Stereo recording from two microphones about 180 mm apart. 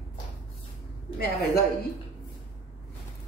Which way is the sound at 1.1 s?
55° left (ahead or behind).